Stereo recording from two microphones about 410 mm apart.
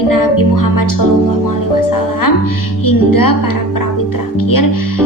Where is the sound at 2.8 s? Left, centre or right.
Left.